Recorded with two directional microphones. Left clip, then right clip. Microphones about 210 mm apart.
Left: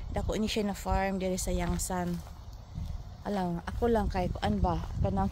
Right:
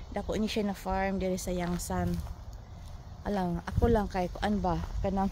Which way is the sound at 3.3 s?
5° left (ahead or behind).